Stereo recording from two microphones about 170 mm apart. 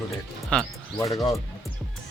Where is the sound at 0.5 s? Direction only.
5° left (ahead or behind).